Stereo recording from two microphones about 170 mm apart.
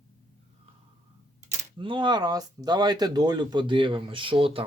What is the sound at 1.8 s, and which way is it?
Speech, 30° right (ahead or behind).